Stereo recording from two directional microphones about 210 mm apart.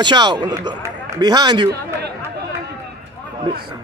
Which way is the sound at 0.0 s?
20° right (ahead or behind).